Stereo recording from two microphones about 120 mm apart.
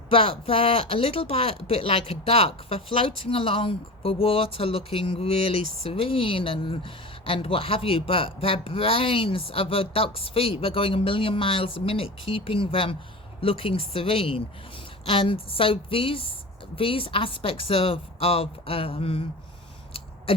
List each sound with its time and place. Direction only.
0.1 s speech: 50° left (ahead or behind)